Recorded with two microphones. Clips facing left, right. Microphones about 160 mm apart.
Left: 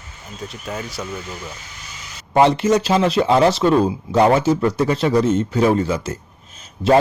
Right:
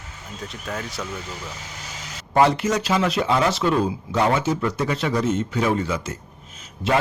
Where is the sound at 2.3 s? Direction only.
20° left (ahead or behind).